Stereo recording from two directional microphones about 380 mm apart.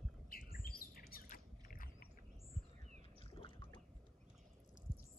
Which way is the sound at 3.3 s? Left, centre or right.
Centre.